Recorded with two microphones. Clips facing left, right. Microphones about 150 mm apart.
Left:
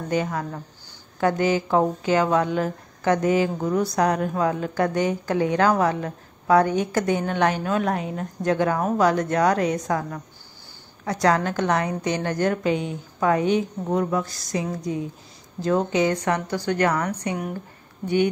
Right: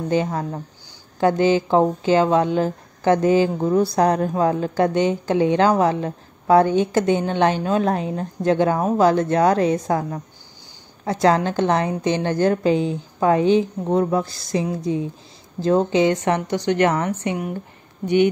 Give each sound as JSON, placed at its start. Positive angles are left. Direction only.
{"t": 0.1, "sound": "speech", "side_deg": -30}